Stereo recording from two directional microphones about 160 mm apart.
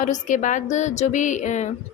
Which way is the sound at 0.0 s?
50° left (ahead or behind).